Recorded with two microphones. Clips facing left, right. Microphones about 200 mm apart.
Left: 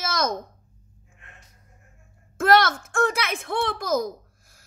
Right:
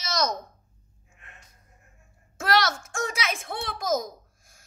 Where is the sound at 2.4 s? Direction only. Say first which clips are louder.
Left 6 dB; 55° left (ahead or behind).